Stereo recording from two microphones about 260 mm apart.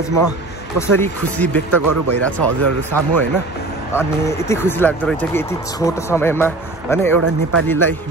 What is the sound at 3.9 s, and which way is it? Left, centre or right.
Speech, centre.